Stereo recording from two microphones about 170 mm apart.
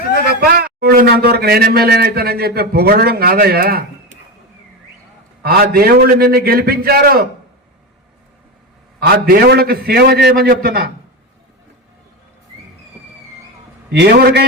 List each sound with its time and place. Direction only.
0.1 s a man's voice: 65° right (ahead or behind)
5.4 s a man's voice: 60° right (ahead or behind)
9.0 s a man's voice: 65° right (ahead or behind); by 10.5 s 85° right
10.5 s a man's voice: 60° right (ahead or behind)
14.0 s a man's voice: 70° right (ahead or behind)